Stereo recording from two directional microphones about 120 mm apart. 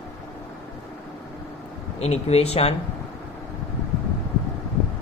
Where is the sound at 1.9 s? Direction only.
60° left (ahead or behind).